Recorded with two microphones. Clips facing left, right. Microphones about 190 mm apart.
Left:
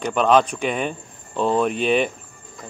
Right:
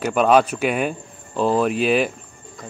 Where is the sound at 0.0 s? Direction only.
5° right (ahead or behind).